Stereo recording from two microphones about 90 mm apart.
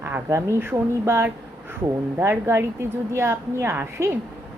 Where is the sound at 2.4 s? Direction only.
30° right (ahead or behind).